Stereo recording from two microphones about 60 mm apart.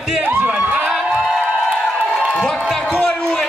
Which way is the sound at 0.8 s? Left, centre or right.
Centre.